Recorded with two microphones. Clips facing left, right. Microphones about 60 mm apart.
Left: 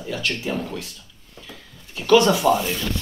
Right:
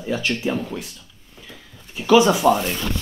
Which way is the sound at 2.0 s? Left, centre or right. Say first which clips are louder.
Right 1 dB; centre.